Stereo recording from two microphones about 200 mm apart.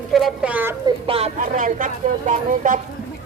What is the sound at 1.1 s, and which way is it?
Speech, 30° right (ahead or behind).